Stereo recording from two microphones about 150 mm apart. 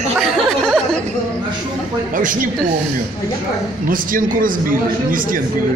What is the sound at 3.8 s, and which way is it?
A man's voice, 65° right (ahead or behind).